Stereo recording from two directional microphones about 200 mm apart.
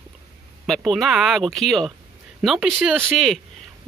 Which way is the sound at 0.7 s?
Centre (ahead or behind).